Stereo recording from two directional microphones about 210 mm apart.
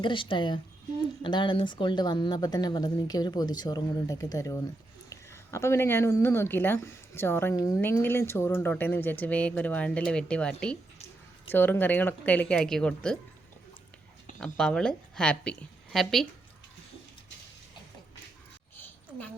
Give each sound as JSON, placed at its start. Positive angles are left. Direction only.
{"t": 0.0, "sound": "speech", "side_deg": 25}
{"t": 14.3, "sound": "a woman's voice", "side_deg": 5}